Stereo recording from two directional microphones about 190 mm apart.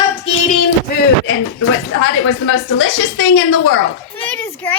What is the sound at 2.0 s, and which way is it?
A woman's voice, 90° left.